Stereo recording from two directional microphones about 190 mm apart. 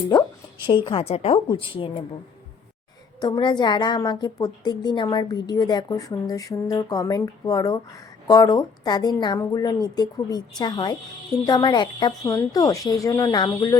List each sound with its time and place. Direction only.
0.7 s a woman's voice: 30° left (ahead or behind)
3.2 s a woman's voice: 20° left (ahead or behind)